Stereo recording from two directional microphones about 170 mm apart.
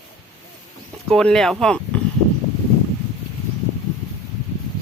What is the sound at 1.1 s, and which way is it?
Speech, 5° left (ahead or behind).